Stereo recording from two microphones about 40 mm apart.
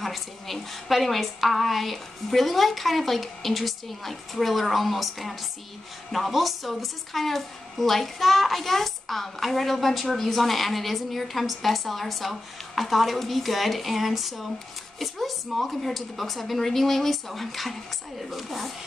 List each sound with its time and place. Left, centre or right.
0.0 s a woman's voice: centre